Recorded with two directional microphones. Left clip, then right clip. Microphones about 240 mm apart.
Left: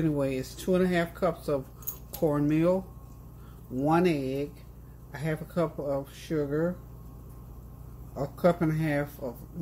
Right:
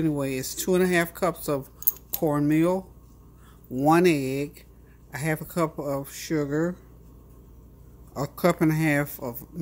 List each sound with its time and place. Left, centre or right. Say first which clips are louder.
0.0 s speech: right 2 dB; centre
8.1 s speech: right 1 dB; right